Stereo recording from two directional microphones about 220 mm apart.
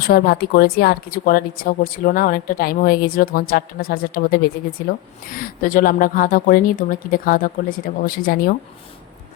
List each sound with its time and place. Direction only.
0.1 s speech: 45° left (ahead or behind)